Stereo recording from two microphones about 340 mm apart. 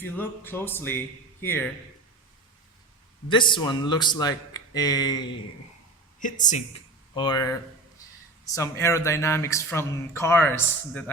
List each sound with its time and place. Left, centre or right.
0.0 s speech: centre
3.2 s speech: centre
6.1 s speech: left
7.2 s speech: centre